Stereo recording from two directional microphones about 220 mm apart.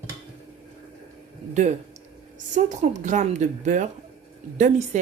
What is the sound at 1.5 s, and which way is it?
A woman's voice, 35° right (ahead or behind).